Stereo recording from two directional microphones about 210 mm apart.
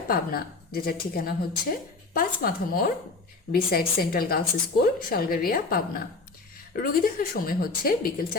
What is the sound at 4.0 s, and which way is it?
A woman's voice, 45° left (ahead or behind).